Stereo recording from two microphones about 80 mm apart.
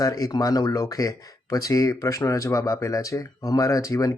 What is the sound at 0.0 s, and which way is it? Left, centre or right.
Speech, left.